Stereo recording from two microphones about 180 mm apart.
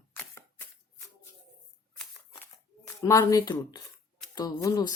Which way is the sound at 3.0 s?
20° left (ahead or behind).